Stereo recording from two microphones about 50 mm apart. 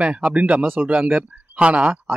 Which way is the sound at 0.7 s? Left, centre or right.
Right.